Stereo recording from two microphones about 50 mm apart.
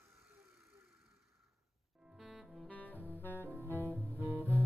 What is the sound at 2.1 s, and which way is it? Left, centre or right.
Music, centre.